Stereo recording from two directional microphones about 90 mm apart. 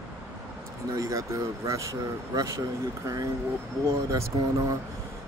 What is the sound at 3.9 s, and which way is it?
Speech, 35° right (ahead or behind).